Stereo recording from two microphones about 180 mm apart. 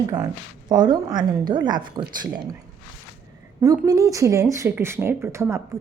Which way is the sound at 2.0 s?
25° right (ahead or behind).